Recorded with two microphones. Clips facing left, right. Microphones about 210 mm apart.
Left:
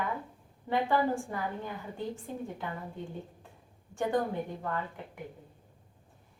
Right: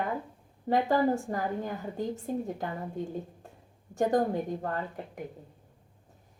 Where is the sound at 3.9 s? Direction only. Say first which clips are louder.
Right 4 dB; 40° right (ahead or behind).